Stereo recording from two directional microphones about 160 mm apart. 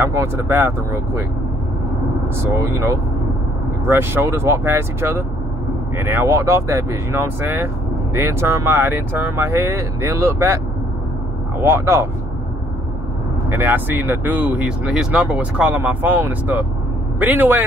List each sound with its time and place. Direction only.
0.0 s speech: 15° right (ahead or behind)
2.5 s speech: 20° right (ahead or behind)
11.6 s speech: 15° right (ahead or behind)
13.5 s speech: 15° right (ahead or behind)